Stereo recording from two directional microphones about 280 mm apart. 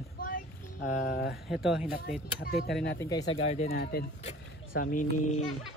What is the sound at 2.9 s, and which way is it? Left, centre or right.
Speech, centre.